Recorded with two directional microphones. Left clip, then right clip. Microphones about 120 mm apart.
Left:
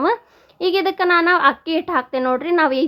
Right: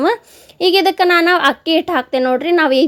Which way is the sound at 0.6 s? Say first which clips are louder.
Right 6 dB; 30° right (ahead or behind).